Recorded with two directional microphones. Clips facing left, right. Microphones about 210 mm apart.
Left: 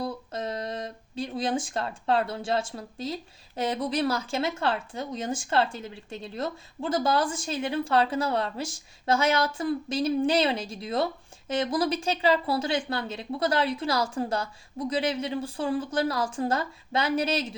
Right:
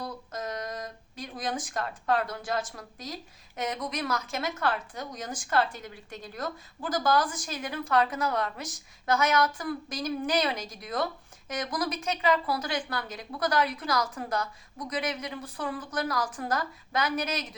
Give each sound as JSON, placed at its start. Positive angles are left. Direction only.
{"t": 0.0, "sound": "speech", "side_deg": 30}